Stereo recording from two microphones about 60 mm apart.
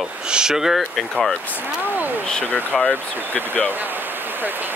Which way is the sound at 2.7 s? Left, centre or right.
Centre.